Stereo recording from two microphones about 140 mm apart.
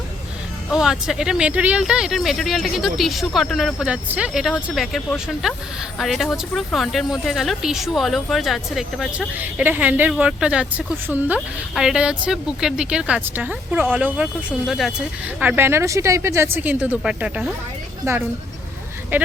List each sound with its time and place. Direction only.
0.7 s speech: 5° right (ahead or behind)
9.4 s speech: 10° right (ahead or behind)
15.4 s speech: 15° right (ahead or behind)
19.1 s speech: 15° right (ahead or behind)